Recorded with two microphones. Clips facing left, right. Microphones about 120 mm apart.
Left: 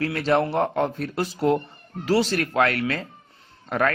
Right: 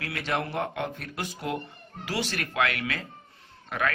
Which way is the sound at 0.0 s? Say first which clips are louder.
Left 9 dB; 35° left (ahead or behind).